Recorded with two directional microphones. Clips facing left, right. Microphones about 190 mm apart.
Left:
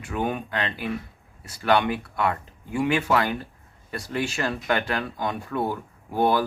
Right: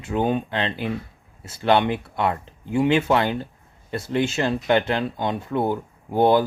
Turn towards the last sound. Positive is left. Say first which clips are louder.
# right 4 dB
turn(degrees=-25)  # may be behind; listen again after turning